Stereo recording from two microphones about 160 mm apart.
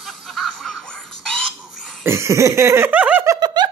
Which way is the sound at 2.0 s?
15° right (ahead or behind).